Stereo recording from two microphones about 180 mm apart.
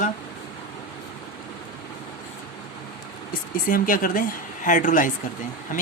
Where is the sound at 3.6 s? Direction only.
50° left (ahead or behind).